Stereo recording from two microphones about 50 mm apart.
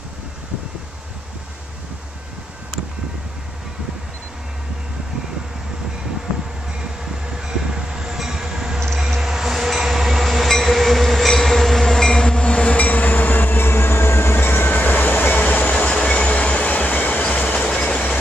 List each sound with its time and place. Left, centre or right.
7.3 s train: centre
8.7 s a sound: centre
9.1 s train: centre
12.7 s train: left
15.7 s train: left
17.6 s train: centre